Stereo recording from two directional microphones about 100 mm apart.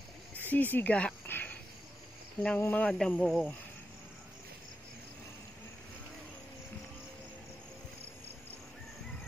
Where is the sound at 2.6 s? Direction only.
15° left (ahead or behind).